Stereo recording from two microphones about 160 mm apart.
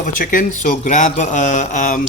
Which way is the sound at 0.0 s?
55° left (ahead or behind).